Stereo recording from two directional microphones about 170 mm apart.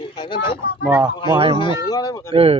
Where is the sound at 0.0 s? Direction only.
25° left (ahead or behind).